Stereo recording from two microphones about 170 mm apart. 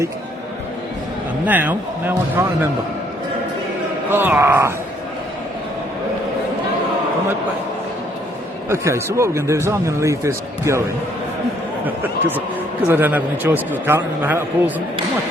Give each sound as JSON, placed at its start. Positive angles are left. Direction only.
{"t": 1.5, "sound": "speech", "side_deg": -10}
{"t": 4.1, "sound": "speech", "side_deg": -10}
{"t": 8.7, "sound": "speech", "side_deg": -15}
{"t": 12.9, "sound": "speech", "side_deg": -10}